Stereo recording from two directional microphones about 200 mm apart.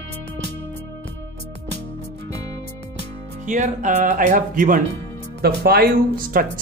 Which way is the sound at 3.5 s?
40° right (ahead or behind).